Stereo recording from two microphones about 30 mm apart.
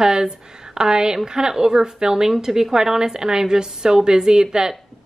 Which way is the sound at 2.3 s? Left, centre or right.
Centre.